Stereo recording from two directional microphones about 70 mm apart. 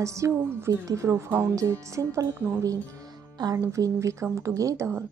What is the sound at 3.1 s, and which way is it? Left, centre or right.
Music, right.